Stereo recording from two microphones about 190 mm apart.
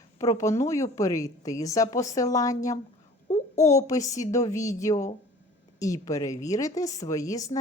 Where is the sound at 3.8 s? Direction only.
15° left (ahead or behind).